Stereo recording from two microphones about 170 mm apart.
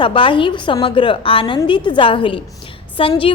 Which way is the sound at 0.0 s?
30° left (ahead or behind).